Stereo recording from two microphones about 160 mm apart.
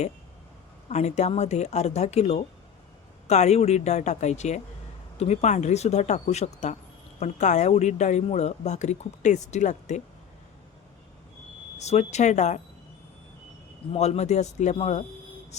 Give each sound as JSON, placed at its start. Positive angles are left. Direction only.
{"t": 0.9, "sound": "a woman's voice", "side_deg": 45}
{"t": 11.8, "sound": "a woman's voice", "side_deg": 45}
{"t": 13.9, "sound": "a woman's voice", "side_deg": 40}